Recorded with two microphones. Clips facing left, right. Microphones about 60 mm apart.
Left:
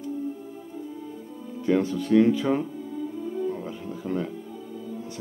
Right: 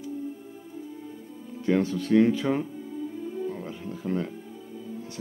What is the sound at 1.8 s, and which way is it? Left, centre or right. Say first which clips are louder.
Speech: left 1 dB; centre.